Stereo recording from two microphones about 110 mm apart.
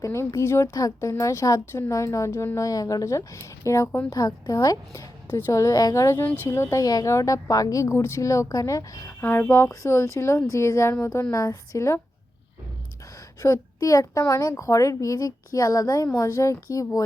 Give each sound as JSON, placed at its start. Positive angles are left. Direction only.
{"t": 0.0, "sound": "a woman's voice", "side_deg": 30}
{"t": 6.2, "sound": "speech", "side_deg": 15}
{"t": 9.2, "sound": "a woman's voice", "side_deg": 20}
{"t": 13.4, "sound": "a woman's voice", "side_deg": 30}